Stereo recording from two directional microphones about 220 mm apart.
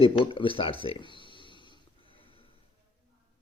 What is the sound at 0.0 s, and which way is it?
Speech, 25° left (ahead or behind).